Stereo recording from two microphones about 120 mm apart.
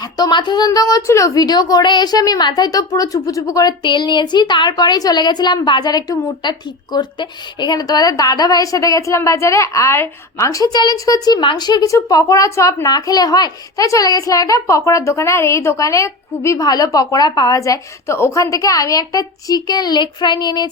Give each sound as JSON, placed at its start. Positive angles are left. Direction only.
{"t": 0.0, "sound": "a woman's voice", "side_deg": 35}